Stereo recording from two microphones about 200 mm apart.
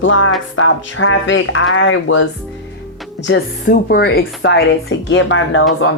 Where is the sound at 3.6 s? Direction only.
45° left (ahead or behind).